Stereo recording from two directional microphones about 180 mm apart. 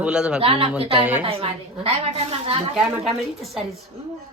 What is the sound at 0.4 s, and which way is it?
A woman's voice, 30° right (ahead or behind).